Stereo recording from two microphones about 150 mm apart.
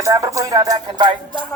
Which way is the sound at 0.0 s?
20° right (ahead or behind).